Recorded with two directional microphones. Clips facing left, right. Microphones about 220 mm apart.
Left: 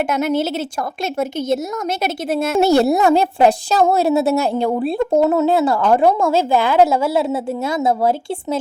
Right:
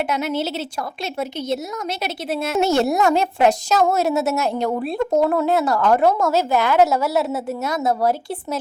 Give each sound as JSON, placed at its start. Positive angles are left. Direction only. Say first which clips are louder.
{"t": 0.0, "sound": "speech", "louder": "left 4 dB", "side_deg": 50}